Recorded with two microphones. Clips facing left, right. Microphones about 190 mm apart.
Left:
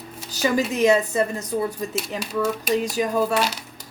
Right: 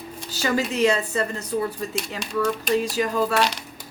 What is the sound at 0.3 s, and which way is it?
A woman's voice, 15° left (ahead or behind).